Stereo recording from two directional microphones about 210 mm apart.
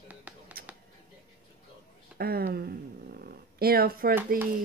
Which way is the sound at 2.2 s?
45° right (ahead or behind).